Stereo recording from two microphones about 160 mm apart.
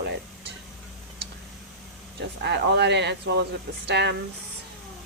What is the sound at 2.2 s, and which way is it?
Speech, 90° right.